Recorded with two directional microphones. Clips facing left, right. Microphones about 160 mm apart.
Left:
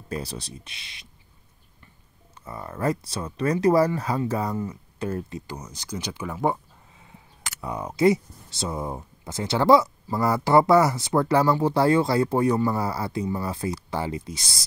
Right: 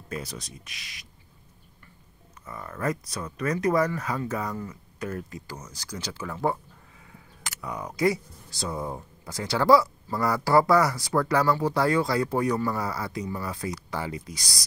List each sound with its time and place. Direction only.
0.1 s speech: 30° left (ahead or behind)
2.4 s speech: 30° left (ahead or behind)
7.6 s speech: 25° left (ahead or behind)